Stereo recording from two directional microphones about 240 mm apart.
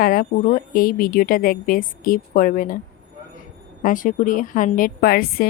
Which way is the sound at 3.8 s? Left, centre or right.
Left.